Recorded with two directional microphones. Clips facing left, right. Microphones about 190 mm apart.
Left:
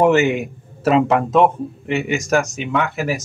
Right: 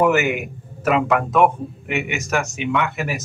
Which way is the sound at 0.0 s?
25° left (ahead or behind).